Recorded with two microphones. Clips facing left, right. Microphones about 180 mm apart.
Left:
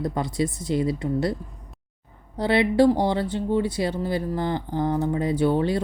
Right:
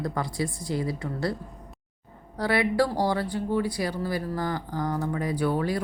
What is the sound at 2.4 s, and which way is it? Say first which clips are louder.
Speech: left 5 dB; 25° left (ahead or behind).